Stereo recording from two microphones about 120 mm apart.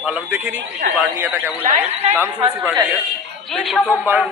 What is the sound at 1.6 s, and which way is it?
Speech, 60° right (ahead or behind).